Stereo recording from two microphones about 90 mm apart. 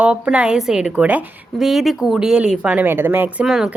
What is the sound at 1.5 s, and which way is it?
Speech, centre (ahead or behind).